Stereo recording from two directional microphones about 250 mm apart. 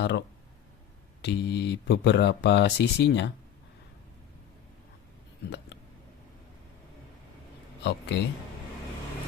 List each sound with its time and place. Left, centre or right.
0.0 s speech: left
5.4 s a sound: left
8.1 s speech: left